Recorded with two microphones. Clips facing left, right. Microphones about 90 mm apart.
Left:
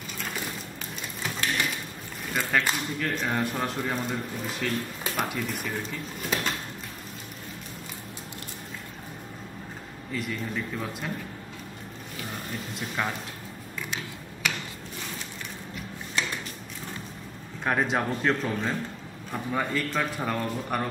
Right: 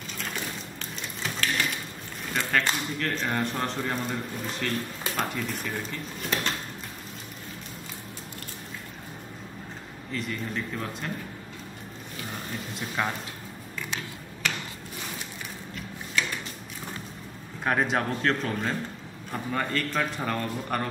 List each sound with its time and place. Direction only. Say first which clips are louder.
0.7 s ratchet: even; 15° left (ahead or behind)
2.3 s speech: even; 5° left (ahead or behind)
10.1 s a man's voice: even; 5° left (ahead or behind)
12.7 s a man's voice: right 1 dB; centre (ahead or behind)
17.6 s a man's voice: even; centre (ahead or behind)